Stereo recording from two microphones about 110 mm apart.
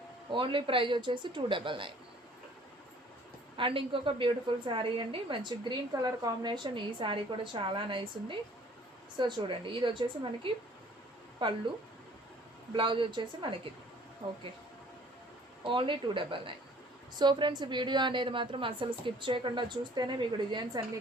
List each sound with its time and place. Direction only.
0.3 s a woman's voice: 50° right (ahead or behind)
3.6 s a woman's voice: 50° right (ahead or behind)
12.7 s a woman's voice: 50° right (ahead or behind)
15.6 s a woman's voice: 50° right (ahead or behind)